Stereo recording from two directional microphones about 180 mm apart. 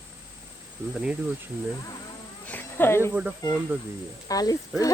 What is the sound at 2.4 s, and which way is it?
Insect, 10° left (ahead or behind).